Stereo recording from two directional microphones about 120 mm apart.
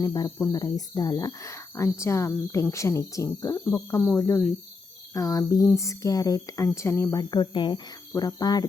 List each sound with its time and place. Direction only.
0.0 s speech: 30° left (ahead or behind)
8.1 s speech: 30° left (ahead or behind)